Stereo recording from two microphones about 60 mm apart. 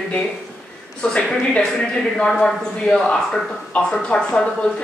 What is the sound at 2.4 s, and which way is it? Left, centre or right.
Speech, centre.